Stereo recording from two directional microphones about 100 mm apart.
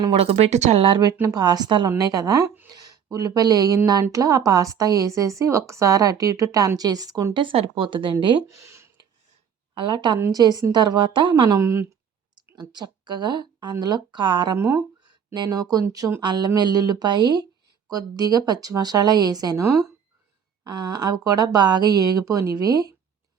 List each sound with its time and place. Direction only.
0.1 s speech: 85° right; by 1.0 s 65° right (ahead or behind)
1.3 s a woman's voice: 40° right (ahead or behind)
7.3 s speech: 55° right (ahead or behind)
8.4 s speech: 30° right (ahead or behind)
9.7 s speech: 50° right (ahead or behind)
11.4 s speech: 30° right (ahead or behind)
12.5 s speech: 50° right (ahead or behind)
14.6 s speech: 25° right (ahead or behind)
15.3 s a woman's voice: 35° right (ahead or behind)
20.7 s a woman's voice: 45° right (ahead or behind)